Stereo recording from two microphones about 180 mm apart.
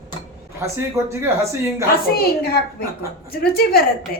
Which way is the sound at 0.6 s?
15° right (ahead or behind).